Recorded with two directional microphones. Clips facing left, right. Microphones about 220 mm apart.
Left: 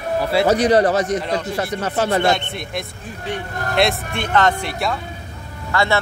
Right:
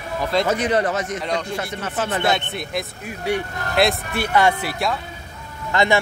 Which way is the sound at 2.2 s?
Centre (ahead or behind).